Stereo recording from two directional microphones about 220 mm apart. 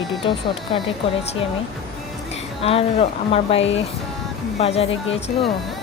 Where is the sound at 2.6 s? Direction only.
25° left (ahead or behind).